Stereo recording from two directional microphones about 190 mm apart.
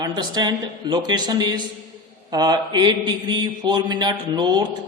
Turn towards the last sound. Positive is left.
turn(degrees=-20)  # may be behind; listen again after turning